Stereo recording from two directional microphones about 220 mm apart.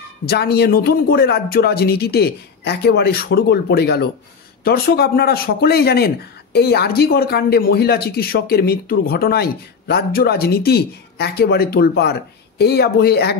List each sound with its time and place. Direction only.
0.2 s speech: 45° left (ahead or behind)